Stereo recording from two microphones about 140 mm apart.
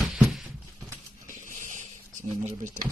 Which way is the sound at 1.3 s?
65° right (ahead or behind).